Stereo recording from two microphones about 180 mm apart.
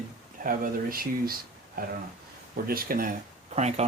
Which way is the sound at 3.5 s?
35° right (ahead or behind).